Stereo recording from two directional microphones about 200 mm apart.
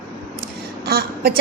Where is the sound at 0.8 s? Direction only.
50° right (ahead or behind).